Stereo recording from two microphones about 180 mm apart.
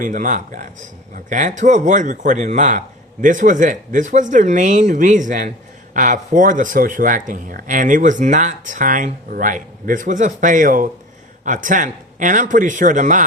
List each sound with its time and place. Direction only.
0.0 s speech: 45° right (ahead or behind)